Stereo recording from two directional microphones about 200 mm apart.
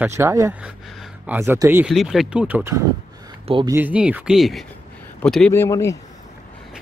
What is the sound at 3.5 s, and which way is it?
Speech, 25° right (ahead or behind).